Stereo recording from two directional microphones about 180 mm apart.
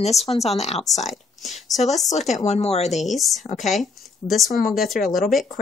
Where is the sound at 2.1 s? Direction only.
40° left (ahead or behind).